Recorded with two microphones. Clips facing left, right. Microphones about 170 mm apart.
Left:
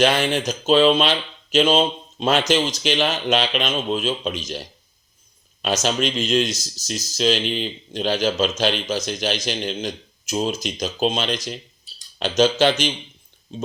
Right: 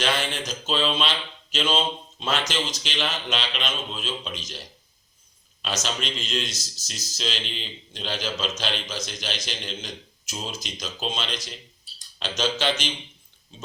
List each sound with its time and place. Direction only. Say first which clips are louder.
0.4 s speech: left 13 dB; 45° left (ahead or behind)
5.6 s speech: left 8 dB; 45° left (ahead or behind)